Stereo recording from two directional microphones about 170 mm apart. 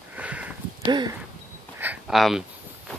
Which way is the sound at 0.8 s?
25° right (ahead or behind).